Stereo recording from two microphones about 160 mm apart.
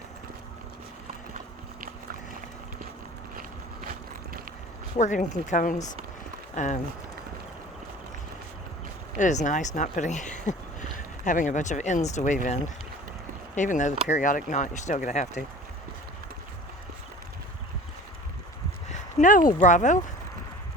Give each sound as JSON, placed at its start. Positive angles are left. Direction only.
{"t": 4.9, "sound": "speech", "side_deg": 50}
{"t": 9.1, "sound": "speech", "side_deg": 50}
{"t": 18.9, "sound": "speech", "side_deg": 55}